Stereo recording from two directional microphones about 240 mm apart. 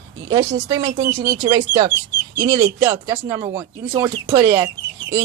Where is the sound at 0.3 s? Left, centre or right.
Centre.